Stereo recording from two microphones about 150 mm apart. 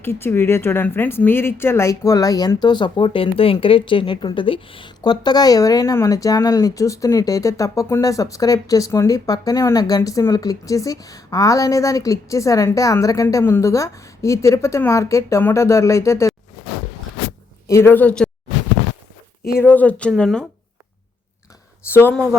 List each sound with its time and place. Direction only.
0.0 s speech: 15° left (ahead or behind)
17.7 s speech: 15° left (ahead or behind)
19.5 s speech: 10° left (ahead or behind)
21.8 s speech: 15° left (ahead or behind)